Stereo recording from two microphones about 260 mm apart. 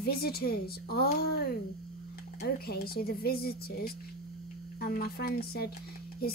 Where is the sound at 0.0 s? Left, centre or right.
Left.